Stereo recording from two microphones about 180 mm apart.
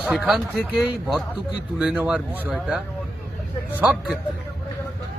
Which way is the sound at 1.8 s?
5° right (ahead or behind).